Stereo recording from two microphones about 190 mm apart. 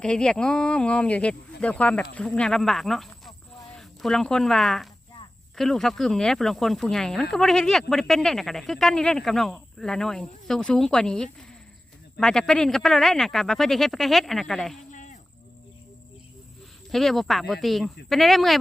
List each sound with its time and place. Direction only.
0.0 s speech: 5° left (ahead or behind)
14.8 s a sound: 40° left (ahead or behind)
16.9 s speech: centre (ahead or behind)